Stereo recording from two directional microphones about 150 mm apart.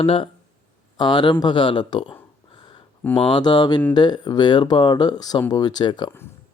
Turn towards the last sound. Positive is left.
turn(degrees=30)  # may be behind; listen again after turning